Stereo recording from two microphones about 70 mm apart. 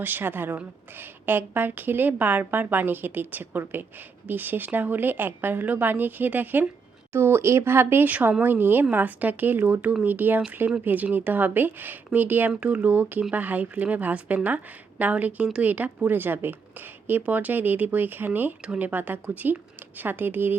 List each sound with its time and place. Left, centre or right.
0.0 s a woman's voice: right